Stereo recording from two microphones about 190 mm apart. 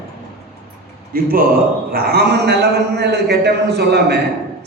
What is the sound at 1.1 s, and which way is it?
A man's voice, 50° right (ahead or behind).